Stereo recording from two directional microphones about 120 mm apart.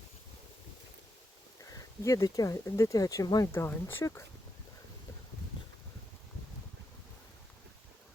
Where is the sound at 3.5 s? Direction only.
20° left (ahead or behind).